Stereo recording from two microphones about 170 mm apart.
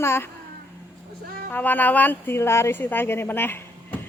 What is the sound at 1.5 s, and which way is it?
Speech, 10° left (ahead or behind).